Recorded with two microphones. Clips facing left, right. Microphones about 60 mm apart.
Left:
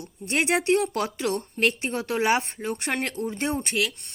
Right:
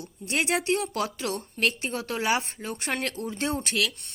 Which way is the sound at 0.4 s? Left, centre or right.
Left.